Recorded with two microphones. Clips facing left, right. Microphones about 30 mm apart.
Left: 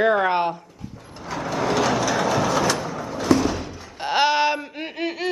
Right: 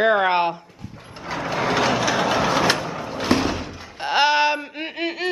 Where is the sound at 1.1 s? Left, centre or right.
Right.